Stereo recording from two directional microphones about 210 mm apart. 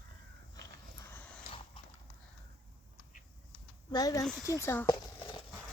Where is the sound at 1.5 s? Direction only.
25° left (ahead or behind).